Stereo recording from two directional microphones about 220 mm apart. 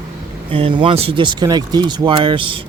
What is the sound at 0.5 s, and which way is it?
Speech, 25° right (ahead or behind).